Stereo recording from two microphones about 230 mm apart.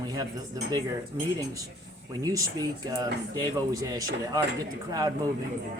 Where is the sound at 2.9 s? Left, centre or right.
Centre.